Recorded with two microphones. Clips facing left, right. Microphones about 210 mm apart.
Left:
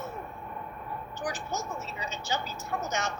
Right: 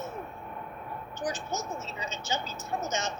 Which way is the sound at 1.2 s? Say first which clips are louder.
Right 1 dB; 20° right (ahead or behind).